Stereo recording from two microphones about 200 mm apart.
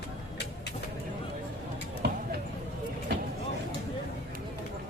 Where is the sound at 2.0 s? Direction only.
55° right (ahead or behind).